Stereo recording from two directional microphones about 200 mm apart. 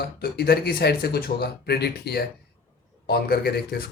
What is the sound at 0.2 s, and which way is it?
Speech, 50° left (ahead or behind).